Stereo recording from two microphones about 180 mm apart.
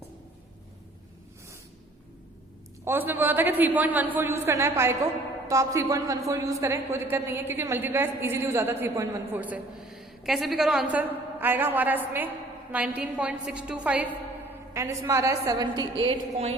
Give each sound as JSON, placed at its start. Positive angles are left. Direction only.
{"t": 2.8, "sound": "a woman's voice", "side_deg": -10}